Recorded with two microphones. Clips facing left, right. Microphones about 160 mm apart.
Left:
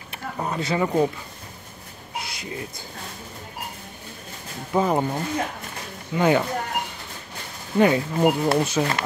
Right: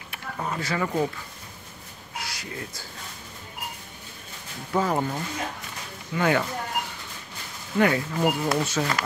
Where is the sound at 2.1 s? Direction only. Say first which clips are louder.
Left 3 dB; 20° left (ahead or behind).